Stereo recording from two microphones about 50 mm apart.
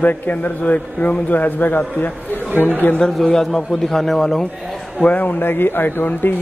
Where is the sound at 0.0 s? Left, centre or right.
Left.